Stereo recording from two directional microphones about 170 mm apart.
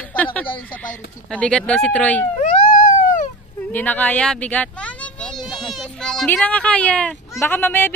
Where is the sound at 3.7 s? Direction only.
10° left (ahead or behind).